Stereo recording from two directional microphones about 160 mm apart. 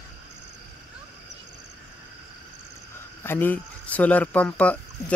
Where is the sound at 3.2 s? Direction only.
15° left (ahead or behind).